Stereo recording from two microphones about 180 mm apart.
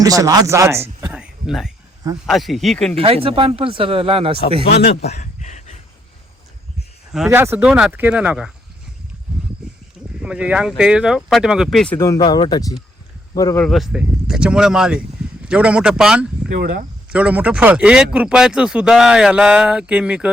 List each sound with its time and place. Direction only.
0.0 s speech: 20° right (ahead or behind); by 2.9 s centre (ahead or behind)
2.9 s speech: 30° right (ahead or behind)
4.7 s speech: 65° left (ahead or behind)
5.2 s a sound: 40° left (ahead or behind)
7.3 s speech: 10° right (ahead or behind)
10.2 s speech: 5° right (ahead or behind)
11.9 s speech: 20° left (ahead or behind)
13.7 s speech: centre (ahead or behind)